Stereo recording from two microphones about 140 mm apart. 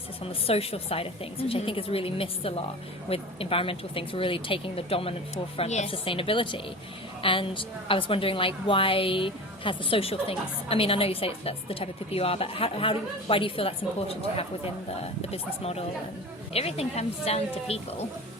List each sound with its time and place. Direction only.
0.3 s a woman's voice: 45° left (ahead or behind)